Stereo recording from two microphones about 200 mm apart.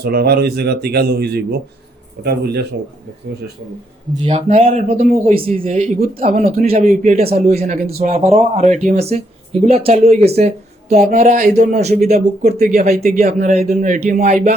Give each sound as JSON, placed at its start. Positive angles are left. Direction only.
{"t": 0.0, "sound": "speech", "side_deg": -50}
{"t": 4.1, "sound": "speech", "side_deg": -35}
{"t": 6.4, "sound": "speech", "side_deg": -45}
{"t": 7.9, "sound": "speech", "side_deg": -35}
{"t": 12.9, "sound": "speech", "side_deg": -45}
{"t": 13.2, "sound": "speech", "side_deg": -35}